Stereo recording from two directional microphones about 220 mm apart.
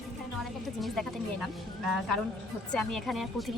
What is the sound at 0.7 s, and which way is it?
Speech, centre (ahead or behind).